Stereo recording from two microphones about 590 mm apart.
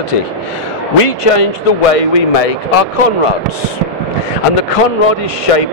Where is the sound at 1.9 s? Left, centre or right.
Left.